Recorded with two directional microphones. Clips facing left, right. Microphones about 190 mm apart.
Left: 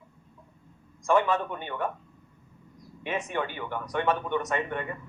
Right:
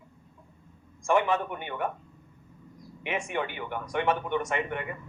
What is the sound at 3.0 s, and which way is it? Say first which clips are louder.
A man's voice: even; 15° right (ahead or behind).